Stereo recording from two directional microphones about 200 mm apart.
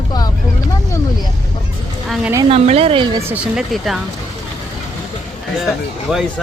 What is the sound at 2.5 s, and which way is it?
Speech, 30° right (ahead or behind).